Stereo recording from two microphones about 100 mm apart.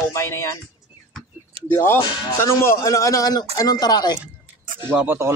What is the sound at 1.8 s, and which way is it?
Speech, 25° left (ahead or behind).